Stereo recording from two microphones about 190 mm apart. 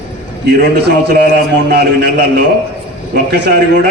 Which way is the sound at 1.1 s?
55° right (ahead or behind).